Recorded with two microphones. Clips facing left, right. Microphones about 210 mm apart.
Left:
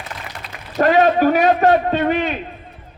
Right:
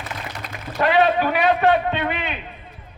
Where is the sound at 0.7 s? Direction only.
45° left (ahead or behind).